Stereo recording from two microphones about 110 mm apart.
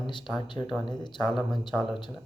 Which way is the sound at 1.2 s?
Centre (ahead or behind).